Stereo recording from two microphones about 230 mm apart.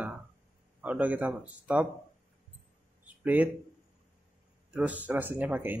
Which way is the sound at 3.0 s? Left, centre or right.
Centre.